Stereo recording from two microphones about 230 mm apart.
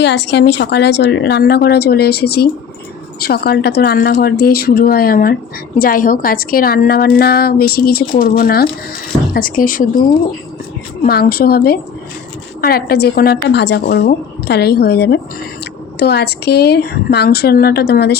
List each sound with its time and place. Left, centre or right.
0.0 s speech: left
11.0 s speech: left